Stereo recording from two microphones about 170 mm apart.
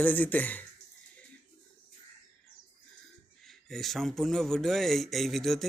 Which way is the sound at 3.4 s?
Centre (ahead or behind).